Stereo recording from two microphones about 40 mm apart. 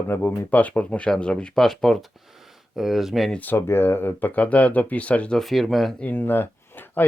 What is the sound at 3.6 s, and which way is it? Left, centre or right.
Speech, left.